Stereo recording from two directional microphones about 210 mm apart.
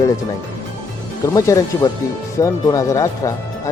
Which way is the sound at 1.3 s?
15° left (ahead or behind).